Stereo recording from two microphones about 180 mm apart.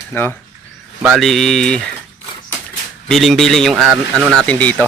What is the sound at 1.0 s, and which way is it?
Speech, 5° right (ahead or behind).